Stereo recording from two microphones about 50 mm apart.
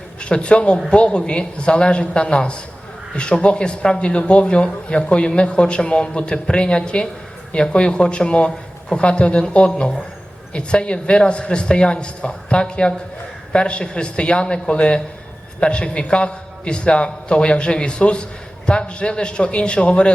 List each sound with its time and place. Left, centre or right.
0.2 s a man's voice: left